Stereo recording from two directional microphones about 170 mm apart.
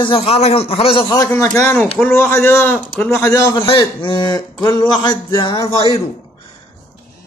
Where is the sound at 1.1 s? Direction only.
15° left (ahead or behind).